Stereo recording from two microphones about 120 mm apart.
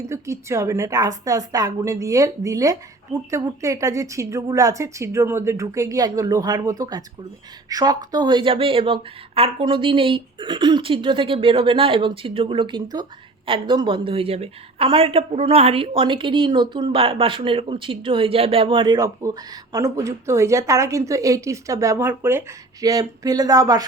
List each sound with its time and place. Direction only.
0.0 s a woman's voice: 25° right (ahead or behind); by 18.9 s 45° right (ahead or behind)
18.9 s a woman's voice: 30° right (ahead or behind)
22.8 s speech: 30° right (ahead or behind)